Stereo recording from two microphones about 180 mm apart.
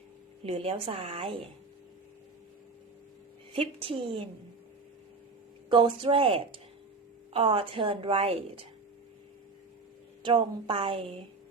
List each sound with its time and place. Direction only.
0.4 s a woman's voice: 30° right (ahead or behind)
3.5 s a woman's voice: 30° right (ahead or behind)
5.6 s a woman's voice: 30° right (ahead or behind)
10.3 s a woman's voice: 30° right (ahead or behind)